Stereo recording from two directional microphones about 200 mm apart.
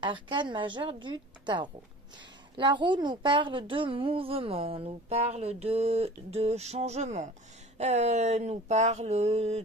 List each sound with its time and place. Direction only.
0.0 s a woman's voice: 25° right (ahead or behind)
7.7 s mantra: 35° right (ahead or behind)